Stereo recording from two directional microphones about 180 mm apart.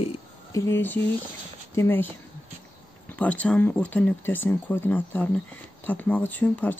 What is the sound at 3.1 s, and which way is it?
Speech, 10° left (ahead or behind).